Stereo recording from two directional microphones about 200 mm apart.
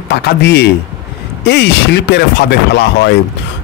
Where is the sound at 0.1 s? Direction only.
55° left (ahead or behind).